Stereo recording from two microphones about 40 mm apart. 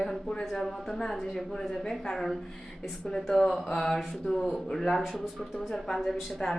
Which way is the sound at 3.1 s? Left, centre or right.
Centre.